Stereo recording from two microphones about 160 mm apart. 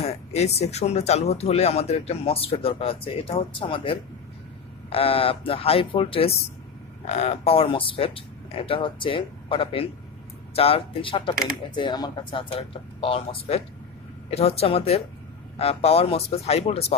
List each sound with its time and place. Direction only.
0.0 s speech: 40° left (ahead or behind)